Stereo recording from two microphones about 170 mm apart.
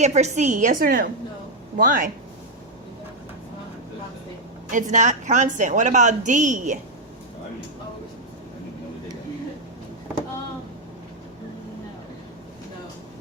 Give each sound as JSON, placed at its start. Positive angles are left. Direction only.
{"t": 0.0, "sound": "a woman's voice", "side_deg": -40}
{"t": 4.7, "sound": "a woman's voice", "side_deg": -50}